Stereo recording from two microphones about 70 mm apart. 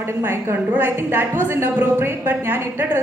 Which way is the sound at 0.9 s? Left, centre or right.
Right.